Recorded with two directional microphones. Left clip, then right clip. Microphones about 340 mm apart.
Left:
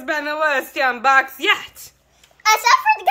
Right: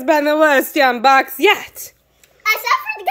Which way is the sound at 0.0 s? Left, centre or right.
Centre.